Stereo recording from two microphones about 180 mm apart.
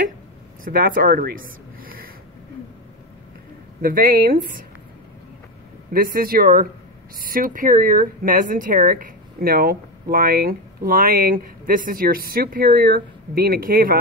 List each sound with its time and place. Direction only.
0.7 s speech: 50° right (ahead or behind)
3.8 s speech: 55° right (ahead or behind)
5.9 s speech: 55° right (ahead or behind)